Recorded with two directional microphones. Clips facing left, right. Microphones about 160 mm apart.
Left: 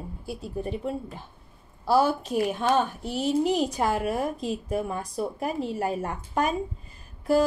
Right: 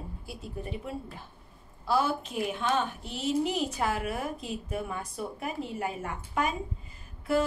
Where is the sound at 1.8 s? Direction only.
40° left (ahead or behind).